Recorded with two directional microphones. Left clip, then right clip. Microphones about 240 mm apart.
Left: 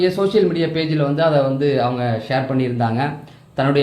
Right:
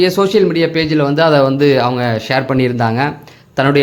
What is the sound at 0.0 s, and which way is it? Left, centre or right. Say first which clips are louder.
A man's voice: right 5 dB; right.